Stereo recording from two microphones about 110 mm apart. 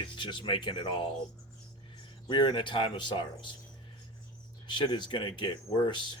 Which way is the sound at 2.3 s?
50° left (ahead or behind).